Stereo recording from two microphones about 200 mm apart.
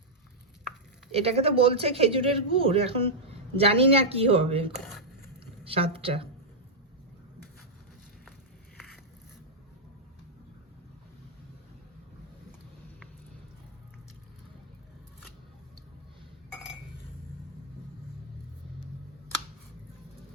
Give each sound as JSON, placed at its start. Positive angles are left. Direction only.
{"t": 1.1, "sound": "speech", "side_deg": -30}
{"t": 4.8, "sound": "speech", "side_deg": 0}
{"t": 5.6, "sound": "speech", "side_deg": -30}